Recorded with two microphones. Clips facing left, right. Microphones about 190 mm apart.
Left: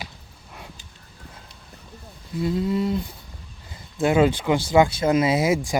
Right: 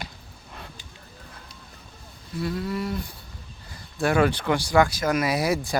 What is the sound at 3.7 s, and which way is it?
Speech, 20° left (ahead or behind).